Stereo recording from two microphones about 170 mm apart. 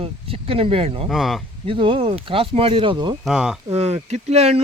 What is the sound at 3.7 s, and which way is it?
Speech, 40° right (ahead or behind).